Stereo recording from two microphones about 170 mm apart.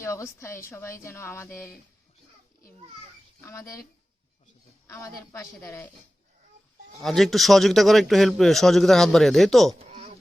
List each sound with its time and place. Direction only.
0.0 s a woman's voice: 15° left (ahead or behind)
3.4 s a woman's voice: 20° left (ahead or behind)
4.9 s a woman's voice: 15° left (ahead or behind)
7.0 s a man's voice: centre (ahead or behind)